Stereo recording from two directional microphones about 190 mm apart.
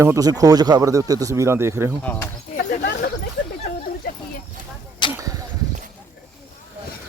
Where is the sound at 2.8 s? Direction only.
55° left (ahead or behind).